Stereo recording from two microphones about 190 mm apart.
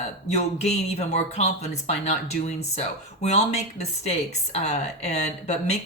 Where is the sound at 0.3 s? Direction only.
35° left (ahead or behind).